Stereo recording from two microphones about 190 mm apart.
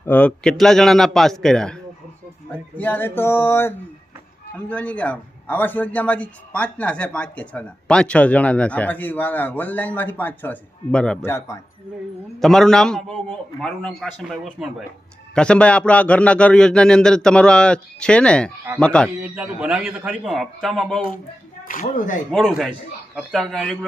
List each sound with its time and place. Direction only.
0.0 s a man's voice: 10° left (ahead or behind)
12.4 s a man's voice: centre (ahead or behind)
21.7 s speech: 45° left (ahead or behind)
22.3 s a man's voice: centre (ahead or behind)